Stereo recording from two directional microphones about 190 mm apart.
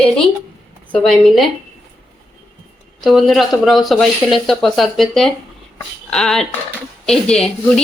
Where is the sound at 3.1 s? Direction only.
Centre (ahead or behind).